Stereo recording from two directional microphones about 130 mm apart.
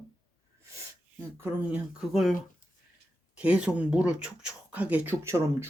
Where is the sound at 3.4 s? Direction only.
10° right (ahead or behind).